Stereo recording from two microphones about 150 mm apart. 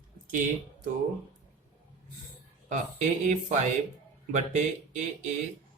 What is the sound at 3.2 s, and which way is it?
Speech, 55° right (ahead or behind).